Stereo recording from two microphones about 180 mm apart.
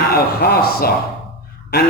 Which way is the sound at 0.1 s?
55° left (ahead or behind).